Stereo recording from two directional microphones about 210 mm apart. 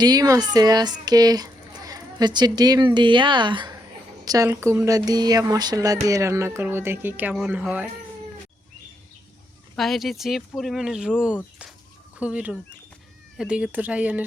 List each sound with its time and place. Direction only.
0.0 s speech: 20° right (ahead or behind)
9.7 s speech: centre (ahead or behind)